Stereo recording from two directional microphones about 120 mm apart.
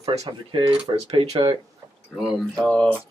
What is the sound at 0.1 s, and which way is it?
Speech, 60° right (ahead or behind).